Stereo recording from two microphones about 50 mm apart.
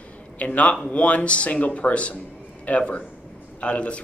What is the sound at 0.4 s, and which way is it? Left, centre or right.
Speech, left.